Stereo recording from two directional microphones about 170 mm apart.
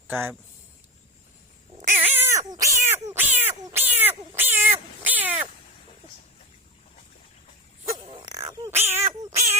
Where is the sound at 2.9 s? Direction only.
15° right (ahead or behind).